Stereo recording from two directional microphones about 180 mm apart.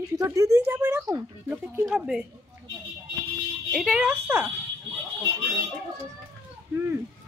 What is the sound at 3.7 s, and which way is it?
Speech, 5° right (ahead or behind).